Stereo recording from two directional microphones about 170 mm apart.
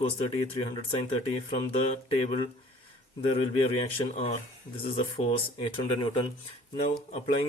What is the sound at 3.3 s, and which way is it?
Speech, 35° left (ahead or behind).